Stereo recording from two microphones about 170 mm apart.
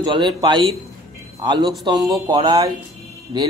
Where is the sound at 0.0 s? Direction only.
25° right (ahead or behind).